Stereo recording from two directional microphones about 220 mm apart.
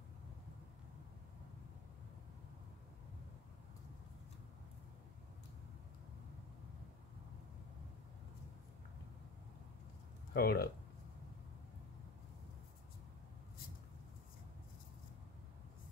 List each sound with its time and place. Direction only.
10.3 s speech: 45° left (ahead or behind)